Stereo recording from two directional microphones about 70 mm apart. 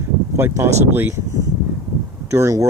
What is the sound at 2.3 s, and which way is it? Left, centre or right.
Speech, right.